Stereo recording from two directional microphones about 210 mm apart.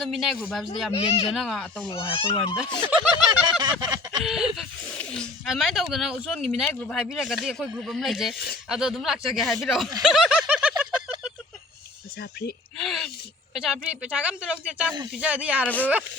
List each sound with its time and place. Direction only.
0.0 s speech: centre (ahead or behind)
0.9 s speech: 30° left (ahead or behind)
1.3 s speech: centre (ahead or behind)
1.9 s speech: 25° left (ahead or behind)
2.8 s speech: 5° right (ahead or behind)
3.4 s a sound: 20° right (ahead or behind)
4.2 s speech: centre (ahead or behind)
10.0 s snicker: centre (ahead or behind)
12.7 s a sound: centre (ahead or behind)
13.5 s speech: 5° right (ahead or behind)
15.6 s speech: 10° left (ahead or behind)